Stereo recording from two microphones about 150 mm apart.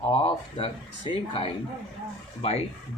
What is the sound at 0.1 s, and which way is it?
Speech, 35° left (ahead or behind).